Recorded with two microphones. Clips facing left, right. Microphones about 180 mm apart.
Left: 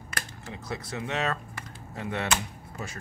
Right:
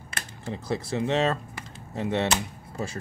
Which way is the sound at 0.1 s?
30° right (ahead or behind).